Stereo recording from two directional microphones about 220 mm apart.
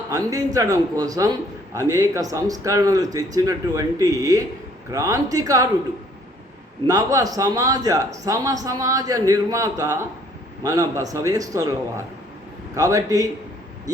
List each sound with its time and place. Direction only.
0.1 s speech: 15° right (ahead or behind)
6.8 s speech: 15° right (ahead or behind)
12.7 s speech: 15° right (ahead or behind)